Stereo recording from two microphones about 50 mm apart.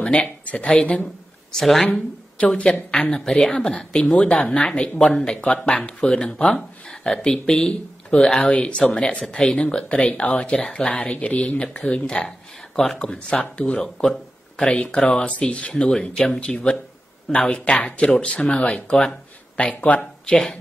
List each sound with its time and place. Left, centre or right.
0.0 s speech: left
1.6 s speech: centre
2.0 s speech: left
12.3 s a sound: centre
13.1 s speech: left
15.9 s speech: centre